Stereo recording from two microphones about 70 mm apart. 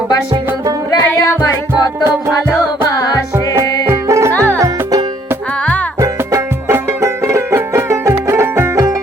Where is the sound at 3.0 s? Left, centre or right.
Left.